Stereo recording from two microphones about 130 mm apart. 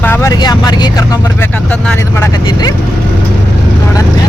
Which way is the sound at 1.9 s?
20° left (ahead or behind).